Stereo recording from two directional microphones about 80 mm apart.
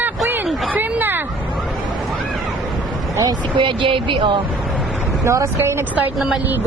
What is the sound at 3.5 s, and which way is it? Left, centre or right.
Speech, right.